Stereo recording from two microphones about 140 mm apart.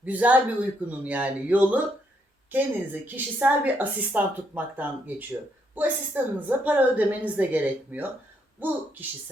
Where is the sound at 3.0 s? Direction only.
15° right (ahead or behind).